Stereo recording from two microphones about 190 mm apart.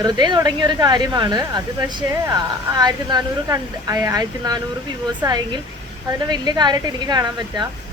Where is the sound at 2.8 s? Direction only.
20° right (ahead or behind).